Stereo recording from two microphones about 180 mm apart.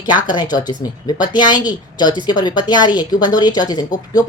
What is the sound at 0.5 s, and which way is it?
Speech, 25° left (ahead or behind).